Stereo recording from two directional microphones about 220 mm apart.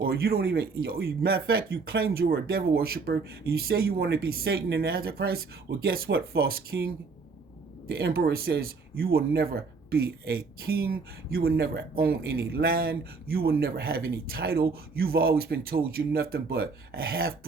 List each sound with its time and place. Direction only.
0.0 s speech: 45° right (ahead or behind)